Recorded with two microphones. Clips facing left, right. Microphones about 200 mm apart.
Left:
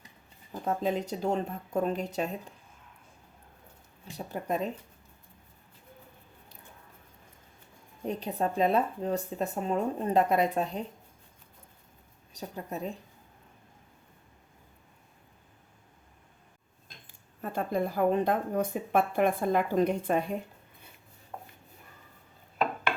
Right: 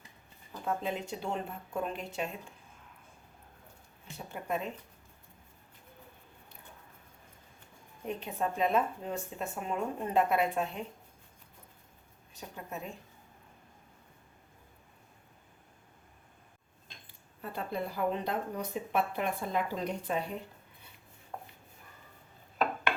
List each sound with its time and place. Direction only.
0.6 s speech: 40° left (ahead or behind)
4.3 s speech: 40° left (ahead or behind)
8.0 s speech: 35° left (ahead or behind)
12.3 s speech: 35° left (ahead or behind)
17.1 s speech: 45° left (ahead or behind)